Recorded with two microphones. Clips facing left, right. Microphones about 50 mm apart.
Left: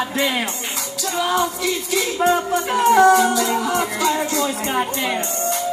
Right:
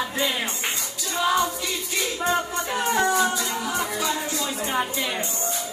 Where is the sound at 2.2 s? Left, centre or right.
Left.